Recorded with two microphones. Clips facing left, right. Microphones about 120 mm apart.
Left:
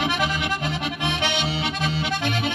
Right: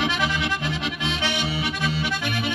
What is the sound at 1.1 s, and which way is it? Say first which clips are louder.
Accordion: left 2 dB; 60° left (ahead or behind).